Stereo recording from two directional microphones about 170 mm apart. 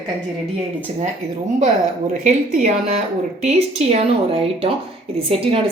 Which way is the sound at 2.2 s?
45° right (ahead or behind).